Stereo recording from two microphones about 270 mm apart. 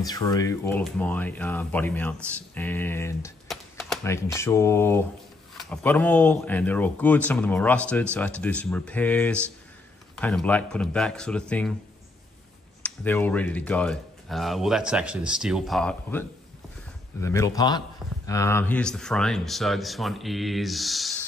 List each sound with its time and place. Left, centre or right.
0.0 s a man's voice: centre
12.8 s a man's voice: centre